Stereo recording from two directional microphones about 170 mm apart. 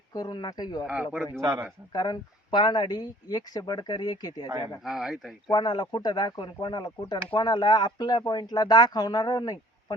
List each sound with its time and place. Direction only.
0.1 s speech: 25° left (ahead or behind)
1.4 s speech: 20° right (ahead or behind)
1.9 s speech: 25° left (ahead or behind)
4.8 s speech: centre (ahead or behind)
5.5 s speech: 25° left (ahead or behind)